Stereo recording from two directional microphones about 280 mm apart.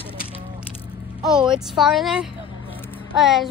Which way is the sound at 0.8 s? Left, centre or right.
Centre.